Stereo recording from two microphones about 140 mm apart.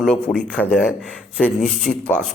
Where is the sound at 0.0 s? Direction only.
5° left (ahead or behind).